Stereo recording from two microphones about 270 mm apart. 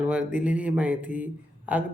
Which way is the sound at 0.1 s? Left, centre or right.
Centre.